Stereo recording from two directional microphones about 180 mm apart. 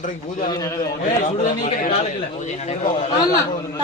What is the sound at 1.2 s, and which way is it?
A man's voice, 45° left (ahead or behind).